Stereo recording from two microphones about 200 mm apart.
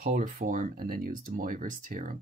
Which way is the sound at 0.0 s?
40° right (ahead or behind).